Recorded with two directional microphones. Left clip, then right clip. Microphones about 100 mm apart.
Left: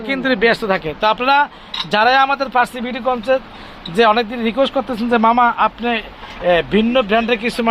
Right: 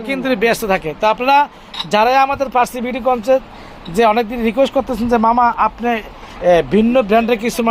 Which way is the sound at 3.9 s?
35° right (ahead or behind).